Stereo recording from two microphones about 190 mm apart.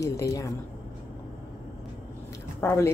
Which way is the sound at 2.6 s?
15° left (ahead or behind).